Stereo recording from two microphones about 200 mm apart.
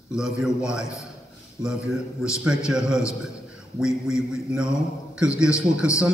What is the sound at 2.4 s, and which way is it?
A man's voice, 5° right (ahead or behind).